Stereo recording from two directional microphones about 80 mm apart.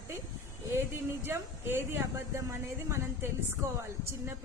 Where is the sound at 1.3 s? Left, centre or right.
Right.